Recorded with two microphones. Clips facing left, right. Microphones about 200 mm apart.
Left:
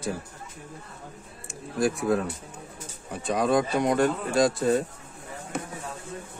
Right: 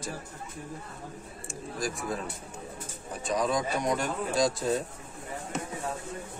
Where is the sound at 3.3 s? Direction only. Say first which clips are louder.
Left 5 dB; 60° left (ahead or behind).